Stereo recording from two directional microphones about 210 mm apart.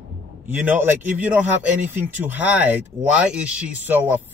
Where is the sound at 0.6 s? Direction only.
10° right (ahead or behind).